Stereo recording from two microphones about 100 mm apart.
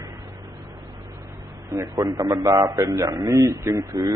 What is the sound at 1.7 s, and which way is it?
A man's voice, 35° right (ahead or behind).